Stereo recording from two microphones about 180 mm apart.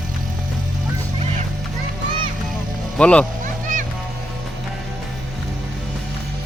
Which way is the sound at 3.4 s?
45° right (ahead or behind).